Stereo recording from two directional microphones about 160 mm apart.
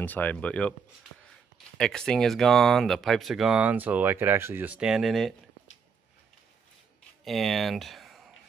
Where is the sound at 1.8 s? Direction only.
5° left (ahead or behind).